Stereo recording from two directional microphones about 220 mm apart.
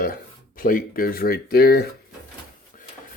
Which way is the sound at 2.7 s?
35° left (ahead or behind).